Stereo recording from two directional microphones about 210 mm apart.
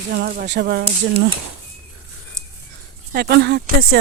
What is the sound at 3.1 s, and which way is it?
Speech, 50° right (ahead or behind).